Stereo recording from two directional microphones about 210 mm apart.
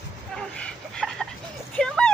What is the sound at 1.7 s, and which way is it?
Vehicle, 5° left (ahead or behind).